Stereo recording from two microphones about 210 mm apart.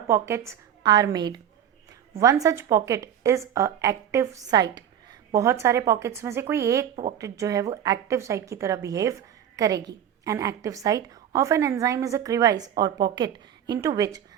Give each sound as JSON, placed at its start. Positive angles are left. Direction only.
{"t": 0.1, "sound": "a woman's voice", "side_deg": -15}